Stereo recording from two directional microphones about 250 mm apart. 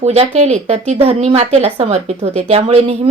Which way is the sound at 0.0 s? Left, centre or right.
Right.